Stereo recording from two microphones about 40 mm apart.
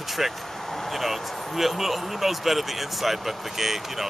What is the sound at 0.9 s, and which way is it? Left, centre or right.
Speech, centre.